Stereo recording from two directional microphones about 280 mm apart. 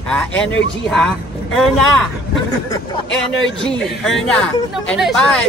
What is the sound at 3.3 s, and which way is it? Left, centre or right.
Speech, left.